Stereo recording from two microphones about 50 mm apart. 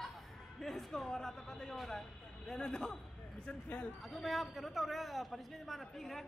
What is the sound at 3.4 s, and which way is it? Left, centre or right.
Speech, left.